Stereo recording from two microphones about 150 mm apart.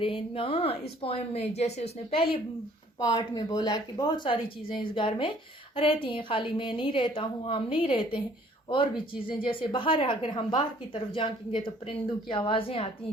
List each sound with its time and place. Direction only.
0.0 s a woman's voice: 35° left (ahead or behind)
3.0 s a woman's voice: 25° left (ahead or behind)
9.4 s a woman's voice: 35° left (ahead or behind)